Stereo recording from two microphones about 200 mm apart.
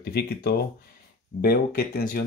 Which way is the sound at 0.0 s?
50° left (ahead or behind).